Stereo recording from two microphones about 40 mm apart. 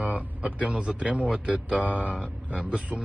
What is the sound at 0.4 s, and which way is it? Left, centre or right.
A man's voice, right.